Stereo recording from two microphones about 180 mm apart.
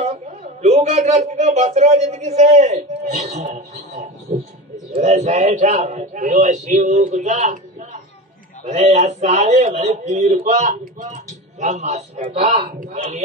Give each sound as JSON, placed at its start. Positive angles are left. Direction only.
{"t": 0.0, "sound": "a man's voice", "side_deg": -40}
{"t": 4.9, "sound": "a man's voice", "side_deg": -40}